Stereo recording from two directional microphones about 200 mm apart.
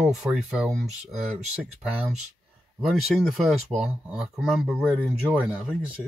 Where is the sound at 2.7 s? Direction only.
Centre (ahead or behind).